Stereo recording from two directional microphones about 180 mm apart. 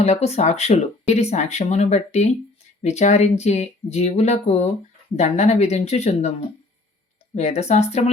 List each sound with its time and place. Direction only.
0.0 s speech: 35° left (ahead or behind)
7.3 s speech: 35° left (ahead or behind)